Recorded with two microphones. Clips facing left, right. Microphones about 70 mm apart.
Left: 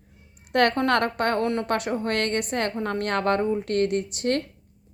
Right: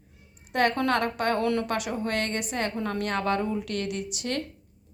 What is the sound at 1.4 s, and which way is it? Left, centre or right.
Speech, left.